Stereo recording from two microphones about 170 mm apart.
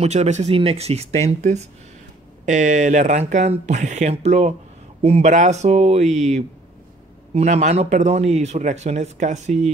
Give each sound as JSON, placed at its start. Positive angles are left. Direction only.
{"t": 0.0, "sound": "speech", "side_deg": -40}